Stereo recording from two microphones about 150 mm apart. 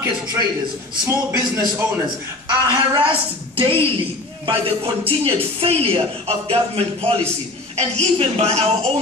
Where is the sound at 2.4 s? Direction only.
35° right (ahead or behind).